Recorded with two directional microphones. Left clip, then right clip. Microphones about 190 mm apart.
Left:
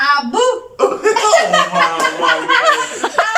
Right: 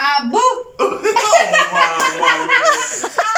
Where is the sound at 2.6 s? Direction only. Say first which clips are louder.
Left 1 dB; 5° right (ahead or behind).